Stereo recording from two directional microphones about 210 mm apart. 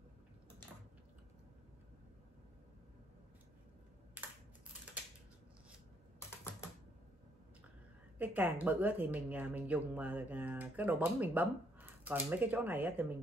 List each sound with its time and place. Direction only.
4.2 s computer keyboard: 5° right (ahead or behind)
8.2 s speech: 10° right (ahead or behind)